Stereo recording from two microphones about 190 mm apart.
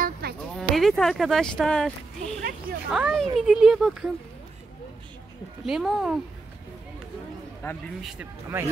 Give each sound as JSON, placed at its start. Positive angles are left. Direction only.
{"t": 0.0, "sound": "a sound", "side_deg": -55}
{"t": 0.6, "sound": "speech", "side_deg": 0}
{"t": 5.7, "sound": "speech", "side_deg": 0}
{"t": 7.6, "sound": "speech", "side_deg": 15}
{"t": 8.0, "sound": "speech", "side_deg": 0}